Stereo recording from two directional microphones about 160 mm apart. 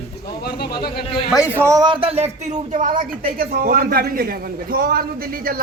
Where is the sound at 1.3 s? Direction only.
10° right (ahead or behind).